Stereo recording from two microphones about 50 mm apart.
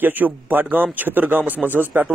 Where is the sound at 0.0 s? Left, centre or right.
Right.